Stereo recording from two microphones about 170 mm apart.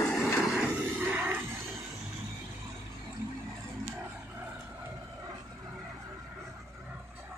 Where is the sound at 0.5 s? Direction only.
10° right (ahead or behind).